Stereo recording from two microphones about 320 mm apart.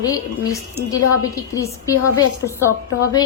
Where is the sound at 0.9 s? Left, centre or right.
Centre.